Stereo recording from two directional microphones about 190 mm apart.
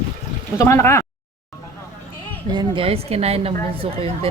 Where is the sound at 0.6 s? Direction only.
15° left (ahead or behind).